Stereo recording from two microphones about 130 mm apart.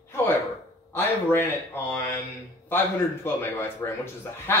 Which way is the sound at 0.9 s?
20° left (ahead or behind).